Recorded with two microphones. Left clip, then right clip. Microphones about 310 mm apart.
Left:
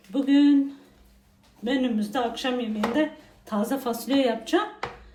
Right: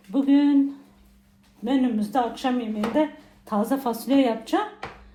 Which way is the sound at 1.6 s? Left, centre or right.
Centre.